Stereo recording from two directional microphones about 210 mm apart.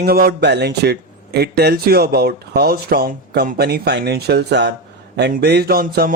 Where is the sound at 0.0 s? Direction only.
45° right (ahead or behind).